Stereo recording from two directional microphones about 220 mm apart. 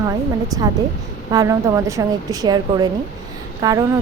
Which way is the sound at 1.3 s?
15° right (ahead or behind).